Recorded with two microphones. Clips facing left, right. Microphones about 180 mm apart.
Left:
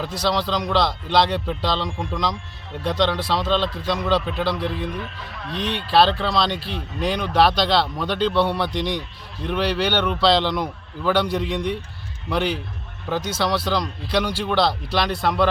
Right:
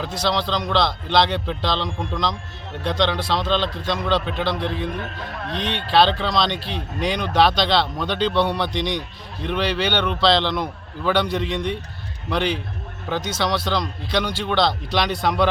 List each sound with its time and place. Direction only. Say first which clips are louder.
0.0 s speech: even; 10° left (ahead or behind)
4.9 s a man's voice: right 2 dB; 50° right (ahead or behind)
5.9 s speech: even; 5° left (ahead or behind)